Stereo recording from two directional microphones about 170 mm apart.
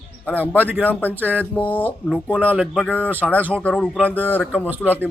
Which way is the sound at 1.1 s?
10° right (ahead or behind).